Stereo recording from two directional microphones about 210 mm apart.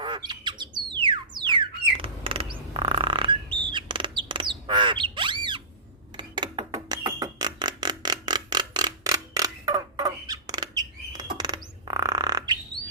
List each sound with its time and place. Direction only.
0.0 s bird: 20° right (ahead or behind)
6.1 s music: 20° right (ahead or behind)